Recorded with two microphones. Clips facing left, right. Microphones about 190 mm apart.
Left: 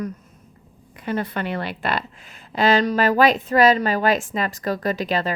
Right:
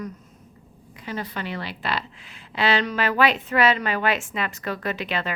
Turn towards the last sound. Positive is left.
turn(degrees=40)  # may be behind; listen again after turning